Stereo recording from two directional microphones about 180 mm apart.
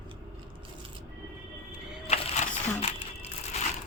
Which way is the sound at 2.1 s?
35° left (ahead or behind).